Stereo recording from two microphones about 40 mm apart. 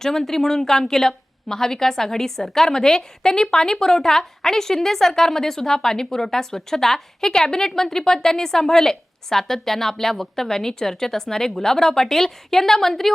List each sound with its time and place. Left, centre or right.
0.0 s a woman's voice: centre